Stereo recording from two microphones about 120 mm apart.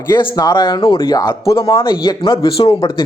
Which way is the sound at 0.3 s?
35° left (ahead or behind).